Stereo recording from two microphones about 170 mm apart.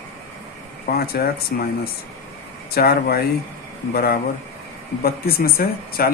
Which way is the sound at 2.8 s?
65° left (ahead or behind).